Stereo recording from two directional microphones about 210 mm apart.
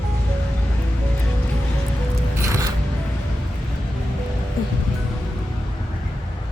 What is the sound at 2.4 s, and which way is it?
Music, 15° right (ahead or behind).